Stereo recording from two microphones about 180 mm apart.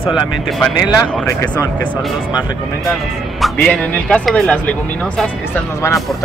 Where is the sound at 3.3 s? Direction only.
Centre (ahead or behind).